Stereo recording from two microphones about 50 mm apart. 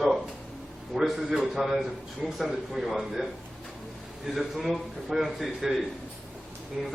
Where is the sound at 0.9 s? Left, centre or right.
Centre.